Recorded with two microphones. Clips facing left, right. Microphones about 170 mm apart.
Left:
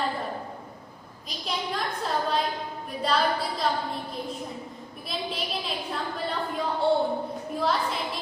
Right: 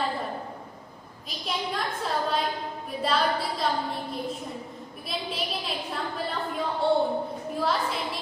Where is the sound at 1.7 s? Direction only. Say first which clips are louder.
Left 1 dB; centre (ahead or behind).